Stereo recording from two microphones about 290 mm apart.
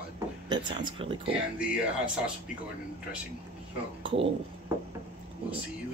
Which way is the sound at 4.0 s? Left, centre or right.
Centre.